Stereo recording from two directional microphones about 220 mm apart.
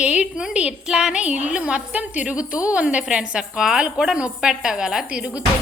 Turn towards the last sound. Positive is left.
turn(degrees=-5)  # may be behind; listen again after turning